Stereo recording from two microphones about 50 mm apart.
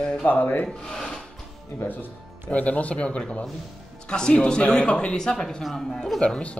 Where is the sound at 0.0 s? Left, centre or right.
Centre.